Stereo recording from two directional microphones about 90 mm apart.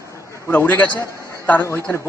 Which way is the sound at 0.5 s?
20° left (ahead or behind).